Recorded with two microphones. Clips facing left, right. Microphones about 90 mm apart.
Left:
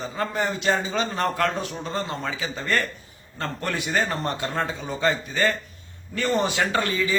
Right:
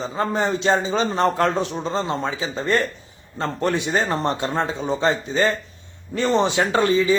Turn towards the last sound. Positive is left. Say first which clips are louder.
# right 6 dB
turn(degrees=-25)  # may be behind; listen again after turning